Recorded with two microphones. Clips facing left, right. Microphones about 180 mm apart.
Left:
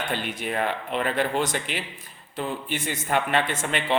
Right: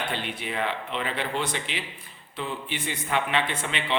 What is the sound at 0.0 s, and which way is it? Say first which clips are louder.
A man's voice: left 2 dB; 45° left (ahead or behind).